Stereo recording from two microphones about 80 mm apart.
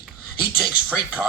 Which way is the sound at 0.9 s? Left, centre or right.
Centre.